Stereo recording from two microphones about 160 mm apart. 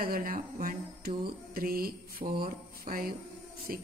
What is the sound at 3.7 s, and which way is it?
Speech, 60° right (ahead or behind).